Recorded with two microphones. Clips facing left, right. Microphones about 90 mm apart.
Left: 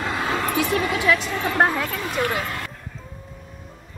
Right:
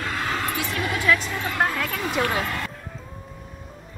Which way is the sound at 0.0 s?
15° left (ahead or behind).